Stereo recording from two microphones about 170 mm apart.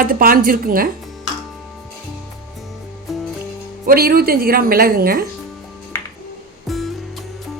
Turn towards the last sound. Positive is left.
turn(degrees=0)  # may be behind; listen again after turning